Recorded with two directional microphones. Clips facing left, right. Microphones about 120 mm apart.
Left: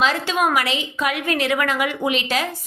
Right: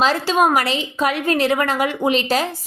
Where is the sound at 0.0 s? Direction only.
35° right (ahead or behind).